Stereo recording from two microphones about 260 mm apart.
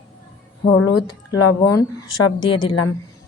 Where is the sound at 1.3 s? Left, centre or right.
Centre.